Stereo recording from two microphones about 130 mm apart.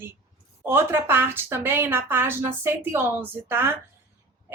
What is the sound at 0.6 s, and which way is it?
Speech, 15° right (ahead or behind).